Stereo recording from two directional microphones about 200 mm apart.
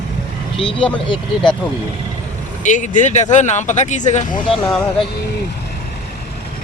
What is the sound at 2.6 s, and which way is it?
Speech, 40° left (ahead or behind).